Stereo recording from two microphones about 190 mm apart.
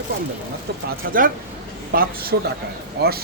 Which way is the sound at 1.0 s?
50° right (ahead or behind).